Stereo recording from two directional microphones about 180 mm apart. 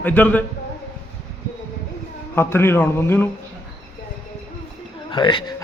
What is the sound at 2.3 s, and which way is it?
Speech, 15° left (ahead or behind).